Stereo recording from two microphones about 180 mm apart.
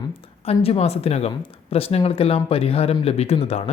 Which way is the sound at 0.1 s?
35° left (ahead or behind).